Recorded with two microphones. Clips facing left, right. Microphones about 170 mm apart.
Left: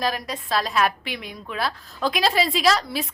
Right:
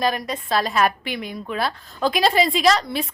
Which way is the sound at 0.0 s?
Centre (ahead or behind).